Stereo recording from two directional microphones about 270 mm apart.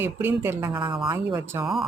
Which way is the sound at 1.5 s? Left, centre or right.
Centre.